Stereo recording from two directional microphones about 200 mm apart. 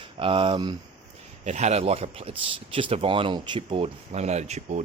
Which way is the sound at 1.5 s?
35° right (ahead or behind).